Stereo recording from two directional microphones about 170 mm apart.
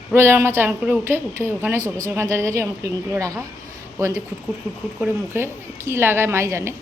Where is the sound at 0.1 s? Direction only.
15° right (ahead or behind).